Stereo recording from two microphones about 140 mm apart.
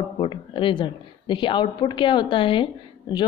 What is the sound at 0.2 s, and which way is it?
Speech, 35° left (ahead or behind).